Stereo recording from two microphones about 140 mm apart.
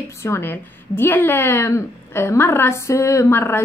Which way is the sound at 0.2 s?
15° left (ahead or behind).